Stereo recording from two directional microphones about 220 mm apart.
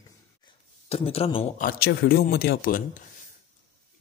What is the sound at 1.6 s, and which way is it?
Speech, 45° left (ahead or behind).